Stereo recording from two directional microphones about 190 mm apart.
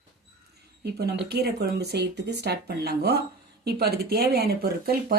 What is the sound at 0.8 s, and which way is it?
A woman's voice, 60° right (ahead or behind).